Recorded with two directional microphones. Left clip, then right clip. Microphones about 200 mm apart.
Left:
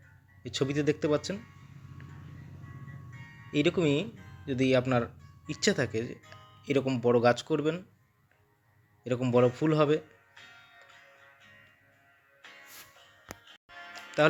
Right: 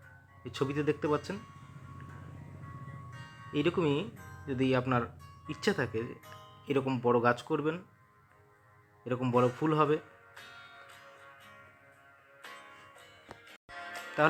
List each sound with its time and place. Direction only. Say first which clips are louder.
0.4 s speech: left 3 dB; 20° left (ahead or behind)
3.5 s speech: left 3 dB; 20° left (ahead or behind)
6.2 s music: right 2 dB; 35° right (ahead or behind)
6.7 s speech: left 2 dB; 15° left (ahead or behind)
9.0 s speech: left 3 dB; 20° left (ahead or behind)
10.3 s music: right 3 dB; 35° right (ahead or behind)
12.4 s music: right 1 dB; 35° right (ahead or behind)